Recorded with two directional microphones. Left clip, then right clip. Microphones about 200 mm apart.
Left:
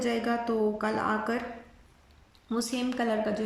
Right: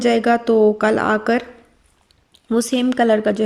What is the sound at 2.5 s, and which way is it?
Speech, 40° right (ahead or behind).